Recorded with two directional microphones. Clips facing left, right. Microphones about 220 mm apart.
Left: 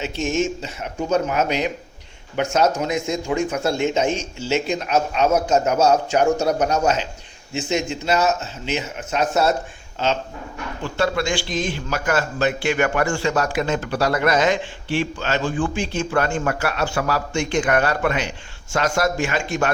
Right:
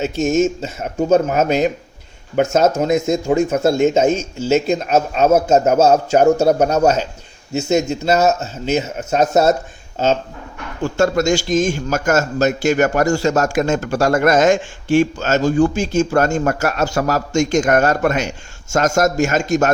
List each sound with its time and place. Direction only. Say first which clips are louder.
0.0 s a man's voice: right 6 dB; 45° right (ahead or behind)
10.8 s a man's voice: right 6 dB; 45° right (ahead or behind)